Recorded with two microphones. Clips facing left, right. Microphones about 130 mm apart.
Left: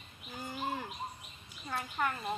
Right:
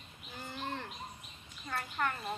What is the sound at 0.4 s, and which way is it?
Bird, 10° left (ahead or behind).